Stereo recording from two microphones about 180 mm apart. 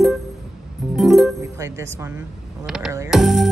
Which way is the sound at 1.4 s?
15° right (ahead or behind).